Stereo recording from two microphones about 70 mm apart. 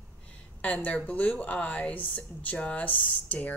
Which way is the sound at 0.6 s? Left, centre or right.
Left.